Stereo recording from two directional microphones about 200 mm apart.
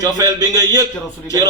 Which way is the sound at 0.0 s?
20° right (ahead or behind).